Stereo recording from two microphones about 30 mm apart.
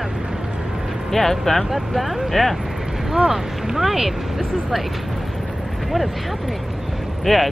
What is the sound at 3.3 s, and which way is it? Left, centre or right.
Speech, centre.